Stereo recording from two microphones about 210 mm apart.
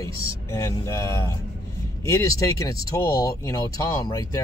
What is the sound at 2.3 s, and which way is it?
Speech, 15° left (ahead or behind).